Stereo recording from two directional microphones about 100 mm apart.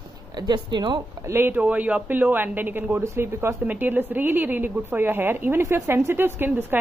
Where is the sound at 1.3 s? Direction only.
20° right (ahead or behind).